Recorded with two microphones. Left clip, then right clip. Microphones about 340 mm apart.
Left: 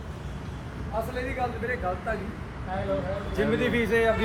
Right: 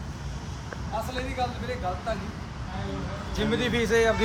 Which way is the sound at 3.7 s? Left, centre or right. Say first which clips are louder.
Right 3 dB; right.